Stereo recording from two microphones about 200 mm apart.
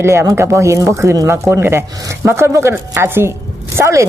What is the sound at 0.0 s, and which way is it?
Speech, 15° right (ahead or behind).